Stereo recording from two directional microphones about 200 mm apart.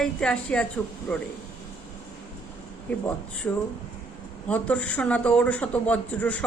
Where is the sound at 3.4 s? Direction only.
10° left (ahead or behind).